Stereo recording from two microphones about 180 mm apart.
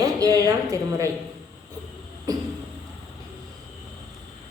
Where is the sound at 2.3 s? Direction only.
20° right (ahead or behind).